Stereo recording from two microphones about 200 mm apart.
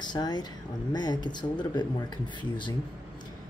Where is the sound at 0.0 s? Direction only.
20° left (ahead or behind).